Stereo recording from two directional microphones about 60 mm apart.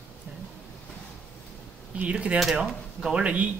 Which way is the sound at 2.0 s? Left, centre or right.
Right.